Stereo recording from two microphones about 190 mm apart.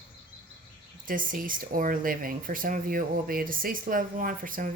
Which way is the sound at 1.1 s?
45° right (ahead or behind).